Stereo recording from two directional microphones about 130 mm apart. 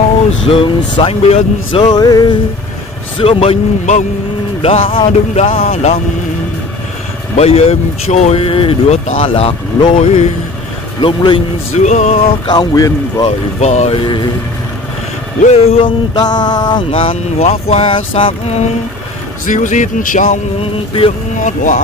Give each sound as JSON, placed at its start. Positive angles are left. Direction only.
{"t": 0.5, "sound": "speech", "side_deg": 45}
{"t": 4.6, "sound": "speech", "side_deg": 45}
{"t": 7.3, "sound": "speech", "side_deg": 50}
{"t": 11.7, "sound": "music", "side_deg": 65}
{"t": 12.4, "sound": "speech", "side_deg": 30}
{"t": 13.6, "sound": "music", "side_deg": 55}
{"t": 15.4, "sound": "speech", "side_deg": 55}
{"t": 16.2, "sound": "speech", "side_deg": 35}
{"t": 19.4, "sound": "speech", "side_deg": 80}
{"t": 21.4, "sound": "speech", "side_deg": 70}